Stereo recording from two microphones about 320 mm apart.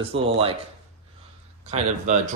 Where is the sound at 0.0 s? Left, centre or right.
Centre.